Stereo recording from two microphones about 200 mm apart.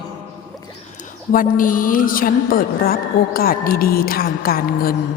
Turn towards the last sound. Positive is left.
turn(degrees=45)  # may be behind; listen again after turning